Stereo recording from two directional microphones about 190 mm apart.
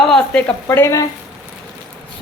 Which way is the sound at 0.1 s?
5° left (ahead or behind).